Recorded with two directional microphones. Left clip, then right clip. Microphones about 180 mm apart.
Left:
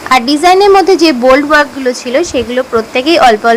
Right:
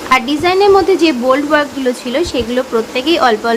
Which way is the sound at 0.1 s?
30° left (ahead or behind).